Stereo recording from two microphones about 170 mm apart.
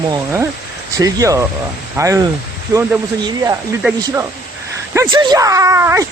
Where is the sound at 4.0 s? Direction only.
20° right (ahead or behind).